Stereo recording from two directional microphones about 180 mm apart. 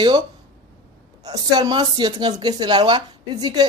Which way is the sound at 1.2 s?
20° right (ahead or behind).